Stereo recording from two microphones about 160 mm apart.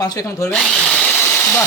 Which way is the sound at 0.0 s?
25° left (ahead or behind).